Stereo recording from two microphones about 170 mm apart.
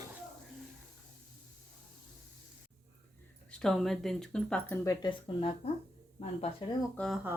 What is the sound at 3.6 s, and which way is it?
Speech, centre (ahead or behind).